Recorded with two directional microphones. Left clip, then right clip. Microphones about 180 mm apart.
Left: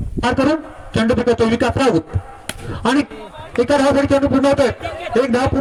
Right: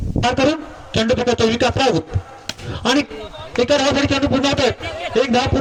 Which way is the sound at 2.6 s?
65° left (ahead or behind).